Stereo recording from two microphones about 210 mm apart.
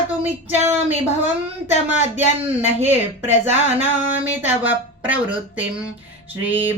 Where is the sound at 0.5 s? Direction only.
30° right (ahead or behind).